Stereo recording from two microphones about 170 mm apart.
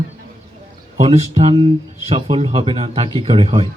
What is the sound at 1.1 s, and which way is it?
Speech, 40° right (ahead or behind).